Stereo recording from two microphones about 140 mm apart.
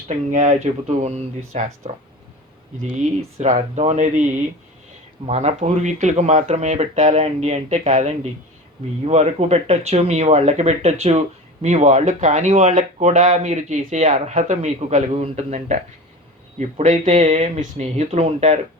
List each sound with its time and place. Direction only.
0.1 s speech: 60° right (ahead or behind)
2.8 s speech: 45° right (ahead or behind)
5.2 s speech: 50° right (ahead or behind)